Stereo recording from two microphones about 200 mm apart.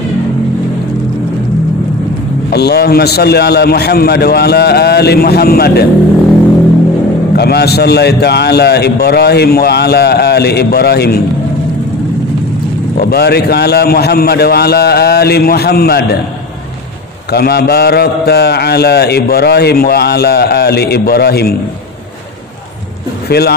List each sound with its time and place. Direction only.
2.5 s a man's voice: 55° left (ahead or behind)
7.3 s a man's voice: 55° left (ahead or behind)
13.0 s a man's voice: 55° left (ahead or behind)
17.3 s a man's voice: 50° left (ahead or behind)
23.2 s speech: 55° left (ahead or behind)